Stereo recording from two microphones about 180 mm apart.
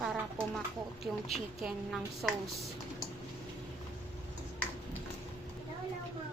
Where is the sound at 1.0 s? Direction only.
Centre (ahead or behind).